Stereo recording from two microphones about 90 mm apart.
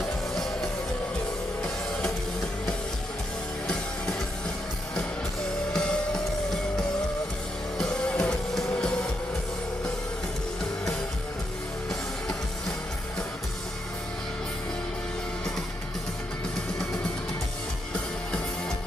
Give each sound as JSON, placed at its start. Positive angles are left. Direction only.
{"t": 0.3, "sound": "music", "side_deg": 5}
{"t": 3.6, "sound": "music", "side_deg": 10}
{"t": 5.7, "sound": "music", "side_deg": 10}
{"t": 7.7, "sound": "music", "side_deg": 5}
{"t": 8.7, "sound": "train", "side_deg": 10}
{"t": 11.9, "sound": "music", "side_deg": 5}